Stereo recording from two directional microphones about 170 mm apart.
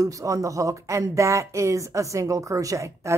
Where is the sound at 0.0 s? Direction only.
20° right (ahead or behind).